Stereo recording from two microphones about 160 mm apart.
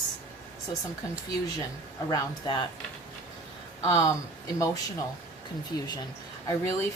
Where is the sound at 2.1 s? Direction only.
25° left (ahead or behind).